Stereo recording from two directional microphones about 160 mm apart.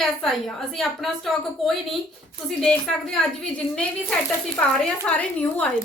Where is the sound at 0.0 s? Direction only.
Centre (ahead or behind).